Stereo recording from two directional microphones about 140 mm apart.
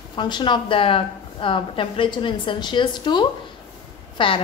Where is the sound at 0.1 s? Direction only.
35° left (ahead or behind).